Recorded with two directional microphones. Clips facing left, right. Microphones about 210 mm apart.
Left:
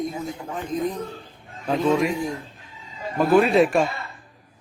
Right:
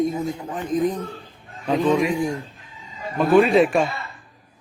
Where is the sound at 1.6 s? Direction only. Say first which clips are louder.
Right 1 dB; centre (ahead or behind).